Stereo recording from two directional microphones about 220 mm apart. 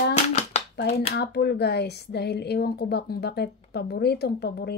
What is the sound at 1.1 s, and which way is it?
Speech, 50° left (ahead or behind).